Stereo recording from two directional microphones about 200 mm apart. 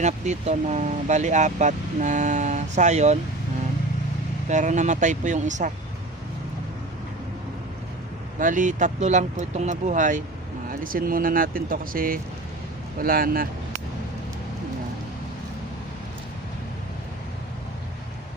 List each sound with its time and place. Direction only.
0.0 s speech: 35° right (ahead or behind)
4.4 s speech: 35° right (ahead or behind)
8.4 s speech: 40° right (ahead or behind)